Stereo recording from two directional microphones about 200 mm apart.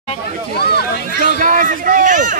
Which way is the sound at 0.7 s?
55° left (ahead or behind).